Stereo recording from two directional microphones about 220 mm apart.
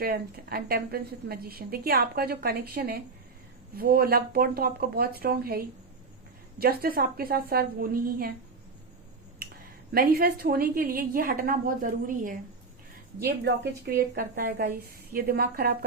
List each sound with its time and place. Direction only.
0.0 s a woman's voice: 40° right (ahead or behind)
9.9 s a woman's voice: 45° right (ahead or behind)
13.2 s a woman's voice: 50° right (ahead or behind)